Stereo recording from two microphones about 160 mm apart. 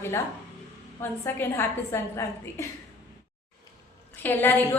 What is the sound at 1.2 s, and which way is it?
A woman's voice, 15° left (ahead or behind).